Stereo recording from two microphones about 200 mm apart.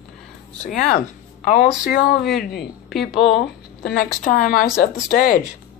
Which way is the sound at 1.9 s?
50° left (ahead or behind).